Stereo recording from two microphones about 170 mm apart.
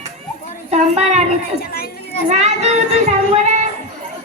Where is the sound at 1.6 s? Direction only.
60° left (ahead or behind).